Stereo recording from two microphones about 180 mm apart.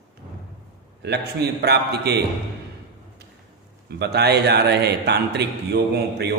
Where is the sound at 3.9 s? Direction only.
65° right (ahead or behind).